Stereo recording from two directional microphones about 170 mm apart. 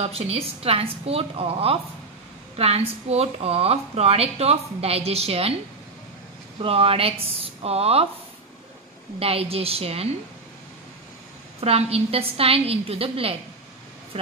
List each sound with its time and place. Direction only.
0.0 s a woman's voice: 35° right (ahead or behind)
6.6 s a woman's voice: 35° right (ahead or behind)
9.2 s a woman's voice: 35° right (ahead or behind)
11.6 s a woman's voice: 35° right (ahead or behind)